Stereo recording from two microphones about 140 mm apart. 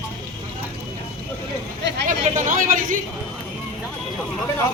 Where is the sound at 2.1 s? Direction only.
65° right (ahead or behind).